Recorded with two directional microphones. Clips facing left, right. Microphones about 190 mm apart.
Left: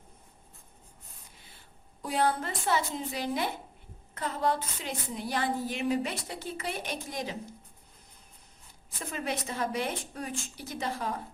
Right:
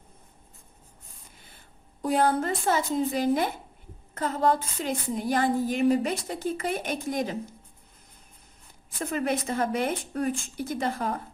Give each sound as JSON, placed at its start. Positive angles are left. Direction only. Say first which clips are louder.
{"t": 2.0, "sound": "speech", "louder": "right 5 dB", "side_deg": -45}
{"t": 9.0, "sound": "speech", "louder": "right 7 dB", "side_deg": -55}